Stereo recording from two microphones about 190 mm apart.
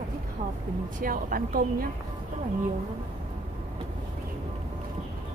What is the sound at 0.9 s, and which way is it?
Speech, 50° right (ahead or behind).